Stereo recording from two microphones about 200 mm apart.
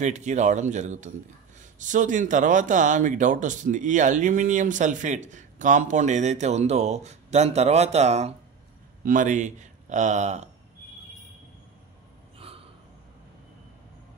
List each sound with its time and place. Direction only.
0.0 s speech: 35° right (ahead or behind)